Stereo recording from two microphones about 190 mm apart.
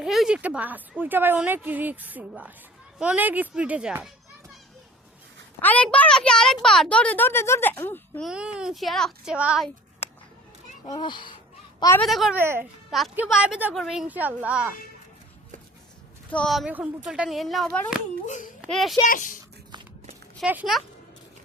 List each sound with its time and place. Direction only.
0.0 s a woman's voice: centre (ahead or behind)
5.6 s a child's voice: 5° left (ahead or behind)
8.3 s a woman's voice: 5° right (ahead or behind)
10.8 s a child's voice: 20° left (ahead or behind)
12.0 s a woman's voice: centre (ahead or behind)
12.4 s a woman's voice: 10° right (ahead or behind)
16.3 s a woman's voice: 5° left (ahead or behind)
19.0 s speech: 45° left (ahead or behind)
20.4 s a woman's voice: 5° right (ahead or behind)